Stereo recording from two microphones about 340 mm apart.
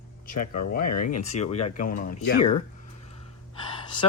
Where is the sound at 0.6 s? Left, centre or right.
Left.